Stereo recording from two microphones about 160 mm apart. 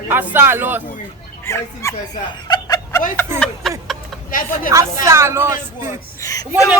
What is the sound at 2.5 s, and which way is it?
Snicker, 25° left (ahead or behind).